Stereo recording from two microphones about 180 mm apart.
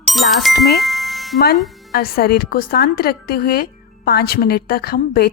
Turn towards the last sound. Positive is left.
turn(degrees=55)  # may be behind; listen again after turning